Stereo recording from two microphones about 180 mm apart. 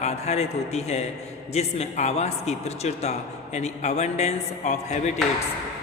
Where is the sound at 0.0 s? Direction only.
35° left (ahead or behind).